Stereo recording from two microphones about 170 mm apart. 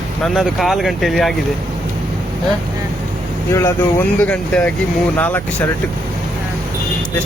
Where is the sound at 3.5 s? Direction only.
15° left (ahead or behind).